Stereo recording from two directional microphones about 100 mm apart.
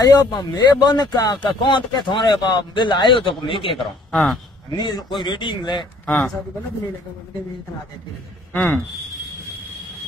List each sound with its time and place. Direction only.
0.0 s speech: 45° left (ahead or behind)
3.6 s a man's voice: centre (ahead or behind)
4.7 s speech: 45° left (ahead or behind)
6.0 s speech: 10° left (ahead or behind)
8.5 s speech: 20° left (ahead or behind)